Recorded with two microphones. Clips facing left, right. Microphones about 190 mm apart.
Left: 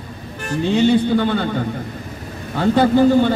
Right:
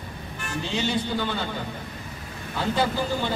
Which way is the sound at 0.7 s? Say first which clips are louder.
Left 12 dB; 55° left (ahead or behind).